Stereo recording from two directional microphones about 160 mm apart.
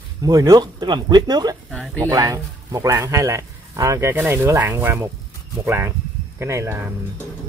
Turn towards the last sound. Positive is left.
turn(degrees=-15)  # may be behind; listen again after turning